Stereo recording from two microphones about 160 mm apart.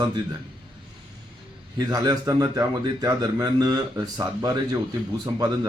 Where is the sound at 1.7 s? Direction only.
25° right (ahead or behind).